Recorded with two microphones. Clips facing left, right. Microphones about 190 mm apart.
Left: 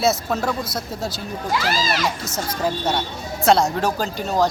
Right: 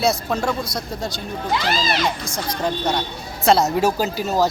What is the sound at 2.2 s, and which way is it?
Speech, 5° left (ahead or behind).